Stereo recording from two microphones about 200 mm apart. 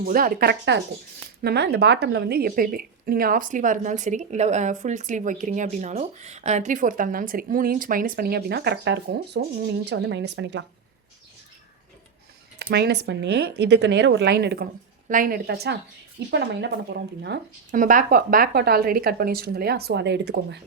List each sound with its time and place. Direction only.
0.0 s a woman's voice: 45° right (ahead or behind); by 10.7 s 65° right (ahead or behind)
12.7 s speech: 55° right (ahead or behind)
15.0 s a woman's voice: 40° right (ahead or behind)
17.7 s a woman's voice: 40° right (ahead or behind); by 20.6 s 60° right (ahead or behind)